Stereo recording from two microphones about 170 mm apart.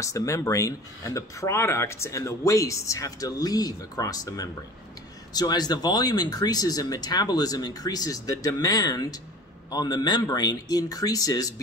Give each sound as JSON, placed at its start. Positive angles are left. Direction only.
{"t": 0.0, "sound": "speech", "side_deg": 20}